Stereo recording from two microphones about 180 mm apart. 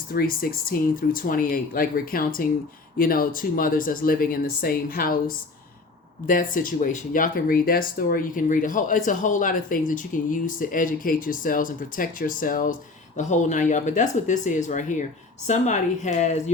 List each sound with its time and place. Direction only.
0.1 s a woman's voice: 55° left (ahead or behind)